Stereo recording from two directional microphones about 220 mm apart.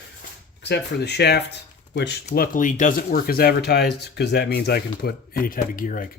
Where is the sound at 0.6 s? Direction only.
50° left (ahead or behind).